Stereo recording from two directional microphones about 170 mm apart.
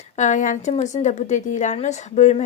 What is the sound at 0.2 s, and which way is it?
A woman's voice, 45° left (ahead or behind).